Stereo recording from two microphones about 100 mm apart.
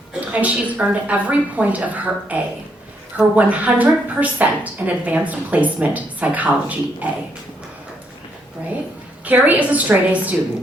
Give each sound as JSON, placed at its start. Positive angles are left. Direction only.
{"t": 0.3, "sound": "a woman's voice", "side_deg": -15}
{"t": 9.2, "sound": "a woman's voice", "side_deg": -15}